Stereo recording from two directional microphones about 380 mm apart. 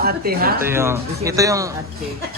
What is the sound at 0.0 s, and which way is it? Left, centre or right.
Speech, right.